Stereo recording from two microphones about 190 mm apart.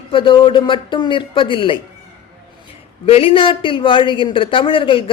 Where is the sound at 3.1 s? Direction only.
30° left (ahead or behind).